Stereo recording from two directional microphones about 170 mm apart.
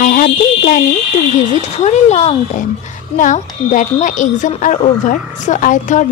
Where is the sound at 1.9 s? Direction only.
40° left (ahead or behind).